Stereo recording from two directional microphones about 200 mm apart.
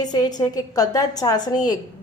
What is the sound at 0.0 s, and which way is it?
A woman's voice, 20° left (ahead or behind).